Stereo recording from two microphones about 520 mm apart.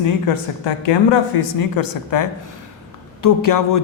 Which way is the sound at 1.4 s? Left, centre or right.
Left.